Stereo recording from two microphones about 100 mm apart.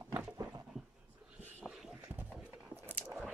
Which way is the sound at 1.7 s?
5° right (ahead or behind).